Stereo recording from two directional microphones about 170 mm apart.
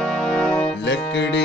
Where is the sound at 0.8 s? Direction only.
90° left.